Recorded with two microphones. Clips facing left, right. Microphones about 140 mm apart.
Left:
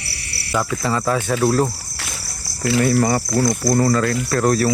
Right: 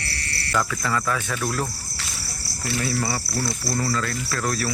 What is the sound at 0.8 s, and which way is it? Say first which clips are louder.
Speech: left 5 dB; 30° left (ahead or behind).